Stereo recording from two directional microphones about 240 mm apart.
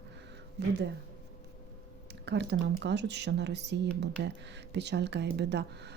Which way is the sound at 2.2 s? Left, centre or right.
Right.